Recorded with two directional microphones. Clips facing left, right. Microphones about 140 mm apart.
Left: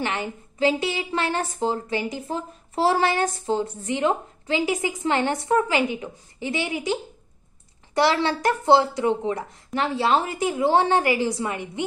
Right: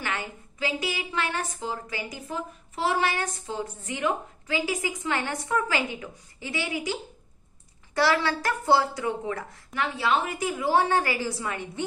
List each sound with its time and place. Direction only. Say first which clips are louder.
0.0 s a woman's voice: left 5 dB; 25° left (ahead or behind)